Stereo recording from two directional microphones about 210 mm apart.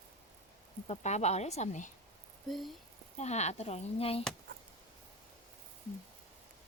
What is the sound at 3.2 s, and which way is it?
Speech, 30° left (ahead or behind).